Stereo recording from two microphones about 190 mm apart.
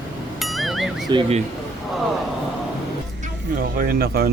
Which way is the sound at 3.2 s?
50° right (ahead or behind).